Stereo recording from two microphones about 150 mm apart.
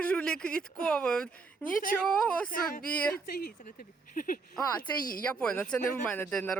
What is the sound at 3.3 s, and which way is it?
Speech, 75° left (ahead or behind).